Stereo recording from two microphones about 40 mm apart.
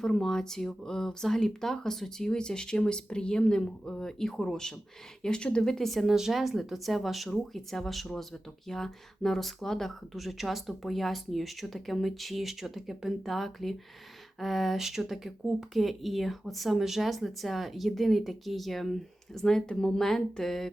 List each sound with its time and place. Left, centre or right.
0.0 s speech: centre; by 5.6 s left
5.6 s speech: centre
6.1 s speech: centre